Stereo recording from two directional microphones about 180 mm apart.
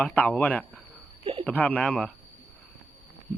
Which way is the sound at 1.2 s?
30° right (ahead or behind).